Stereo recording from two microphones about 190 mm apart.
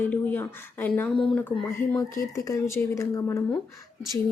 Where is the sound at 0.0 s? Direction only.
10° left (ahead or behind).